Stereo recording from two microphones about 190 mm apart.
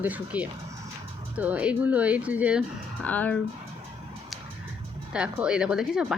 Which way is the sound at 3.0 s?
10° left (ahead or behind).